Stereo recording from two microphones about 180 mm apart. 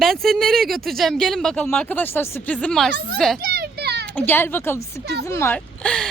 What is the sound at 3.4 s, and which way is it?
Children playing, 60° right (ahead or behind).